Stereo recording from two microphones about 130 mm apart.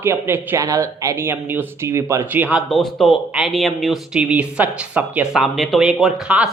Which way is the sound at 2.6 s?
Centre (ahead or behind).